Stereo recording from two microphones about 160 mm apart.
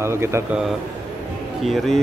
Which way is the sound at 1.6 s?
Centre (ahead or behind).